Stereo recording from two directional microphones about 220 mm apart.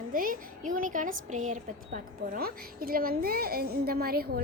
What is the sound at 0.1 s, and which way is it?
A woman's voice, 40° right (ahead or behind).